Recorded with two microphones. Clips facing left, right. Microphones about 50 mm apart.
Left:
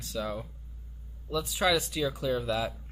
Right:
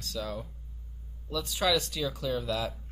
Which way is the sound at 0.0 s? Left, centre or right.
Centre.